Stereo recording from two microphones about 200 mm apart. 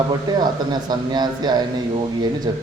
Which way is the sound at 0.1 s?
20° right (ahead or behind).